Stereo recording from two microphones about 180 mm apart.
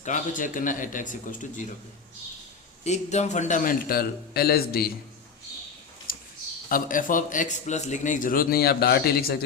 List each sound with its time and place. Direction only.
0.0 s speech: 45° left (ahead or behind)
2.8 s speech: 40° left (ahead or behind); by 4.9 s 55° left (ahead or behind)
6.1 s a sound: 50° left (ahead or behind)
6.7 s speech: 50° left (ahead or behind)